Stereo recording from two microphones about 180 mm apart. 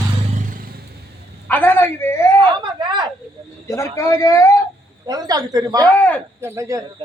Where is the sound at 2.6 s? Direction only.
25° right (ahead or behind).